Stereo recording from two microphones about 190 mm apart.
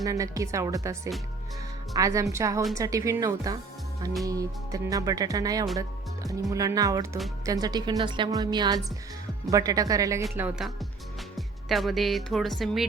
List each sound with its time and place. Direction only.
0.0 s a woman's voice: 15° right (ahead or behind)
10.3 s speech: 5° right (ahead or behind)